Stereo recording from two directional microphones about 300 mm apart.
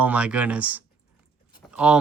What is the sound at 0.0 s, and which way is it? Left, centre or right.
Speech, centre.